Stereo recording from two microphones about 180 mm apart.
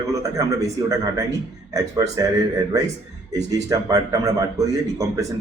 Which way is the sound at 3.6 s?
20° right (ahead or behind).